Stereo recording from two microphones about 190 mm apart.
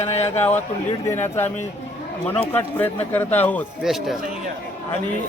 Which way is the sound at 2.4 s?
10° left (ahead or behind).